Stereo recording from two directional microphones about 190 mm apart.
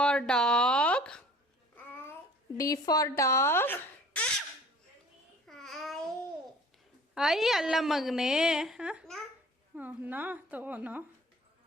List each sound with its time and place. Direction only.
0.0 s speech: 5° left (ahead or behind)
1.7 s babbling: 10° left (ahead or behind)
2.6 s speech: 20° left (ahead or behind)
5.5 s babbling: centre (ahead or behind)
7.1 s a woman's voice: centre (ahead or behind)